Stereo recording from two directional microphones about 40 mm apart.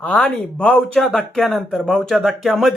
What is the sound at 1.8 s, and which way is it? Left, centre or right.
Speech, centre.